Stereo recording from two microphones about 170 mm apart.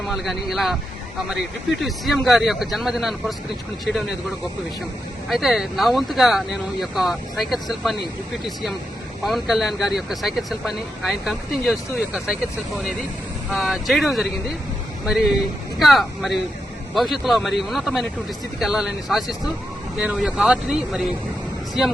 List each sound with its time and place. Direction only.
0.1 s speech: centre (ahead or behind)
5.3 s speech: 5° right (ahead or behind)
9.2 s speech: centre (ahead or behind)
13.5 s speech: centre (ahead or behind)